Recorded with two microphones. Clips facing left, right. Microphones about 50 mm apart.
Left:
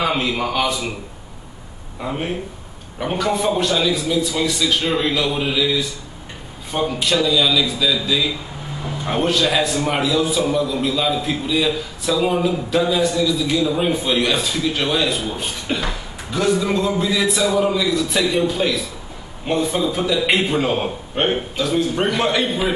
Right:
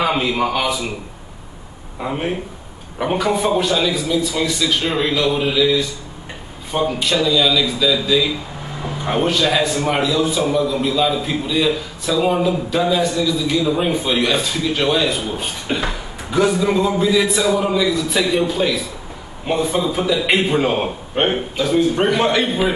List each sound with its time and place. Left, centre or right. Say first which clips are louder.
0.0 s a man's voice: right 2 dB; centre
2.0 s a man's voice: right 2 dB; centre
8.8 s a man's voice: right 1 dB; centre
15.7 s a sound: right 2 dB; centre
16.5 s a man's voice: right 2 dB; centre
21.9 s a man's voice: right 3 dB; centre